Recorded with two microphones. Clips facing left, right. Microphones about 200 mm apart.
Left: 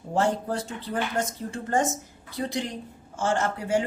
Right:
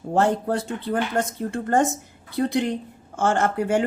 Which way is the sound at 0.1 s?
60° right (ahead or behind).